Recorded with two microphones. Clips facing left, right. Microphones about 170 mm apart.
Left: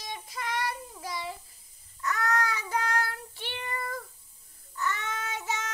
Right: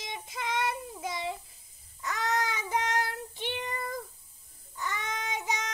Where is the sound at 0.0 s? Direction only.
20° right (ahead or behind).